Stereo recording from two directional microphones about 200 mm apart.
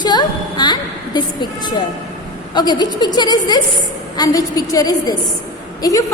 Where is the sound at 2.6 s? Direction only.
20° left (ahead or behind).